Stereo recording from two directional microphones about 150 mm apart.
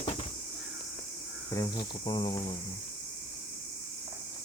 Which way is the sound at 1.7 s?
30° left (ahead or behind).